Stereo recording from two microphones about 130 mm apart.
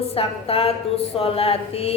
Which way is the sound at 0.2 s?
45° left (ahead or behind).